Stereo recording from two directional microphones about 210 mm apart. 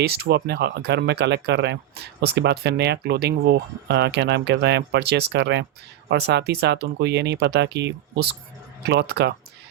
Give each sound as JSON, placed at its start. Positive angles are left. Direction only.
{"t": 0.0, "sound": "speech", "side_deg": -50}